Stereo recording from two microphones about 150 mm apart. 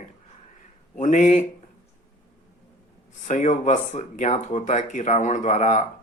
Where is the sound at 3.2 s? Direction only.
50° left (ahead or behind).